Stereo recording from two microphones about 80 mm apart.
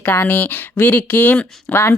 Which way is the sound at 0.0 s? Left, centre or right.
Left.